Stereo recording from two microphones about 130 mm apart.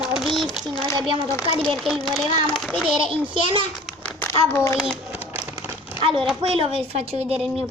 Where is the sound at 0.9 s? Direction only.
40° right (ahead or behind).